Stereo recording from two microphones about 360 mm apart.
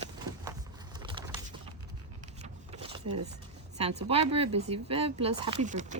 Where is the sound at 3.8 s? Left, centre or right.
Centre.